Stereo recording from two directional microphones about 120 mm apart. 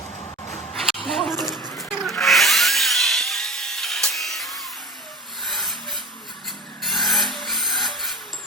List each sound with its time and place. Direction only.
1.0 s a woman's voice: centre (ahead or behind)
1.5 s a sound: 20° left (ahead or behind)
2.0 s wood: centre (ahead or behind)
5.4 s rub: centre (ahead or behind)
6.8 s filing: centre (ahead or behind)